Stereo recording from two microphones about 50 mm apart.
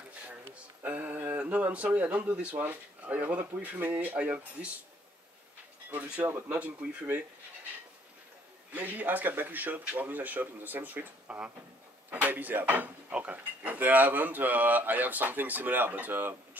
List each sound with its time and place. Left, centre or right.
0.8 s speech: right
6.5 s speech: right
8.7 s speech: right
12.1 s speech: right
13.1 s speech: right